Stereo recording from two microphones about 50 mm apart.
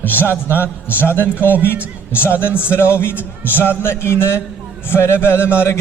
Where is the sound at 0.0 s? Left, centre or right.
Left.